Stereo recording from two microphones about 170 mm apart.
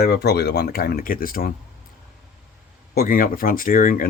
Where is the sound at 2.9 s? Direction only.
60° left (ahead or behind).